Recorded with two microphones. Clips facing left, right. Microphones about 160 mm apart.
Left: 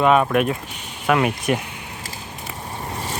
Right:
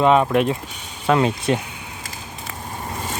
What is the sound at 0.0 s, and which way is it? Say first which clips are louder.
Speech: right 1 dB; 25° right (ahead or behind).